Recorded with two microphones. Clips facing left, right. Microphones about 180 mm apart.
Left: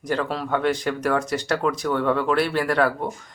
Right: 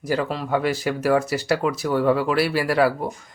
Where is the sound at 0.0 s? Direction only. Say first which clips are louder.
Right 1 dB; 5° right (ahead or behind).